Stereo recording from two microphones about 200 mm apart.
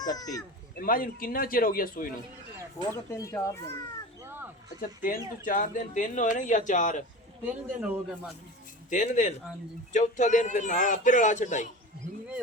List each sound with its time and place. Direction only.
0.0 s speech: 20° left (ahead or behind)
0.8 s a man's voice: 45° left (ahead or behind)
2.9 s speech: 15° left (ahead or behind)
4.8 s a man's voice: 45° left (ahead or behind)
7.8 s a man's voice: 5° right (ahead or behind)
8.9 s a man's voice: 40° left (ahead or behind)